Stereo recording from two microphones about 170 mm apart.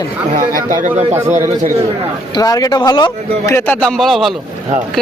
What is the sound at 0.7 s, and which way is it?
Speech, 50° right (ahead or behind).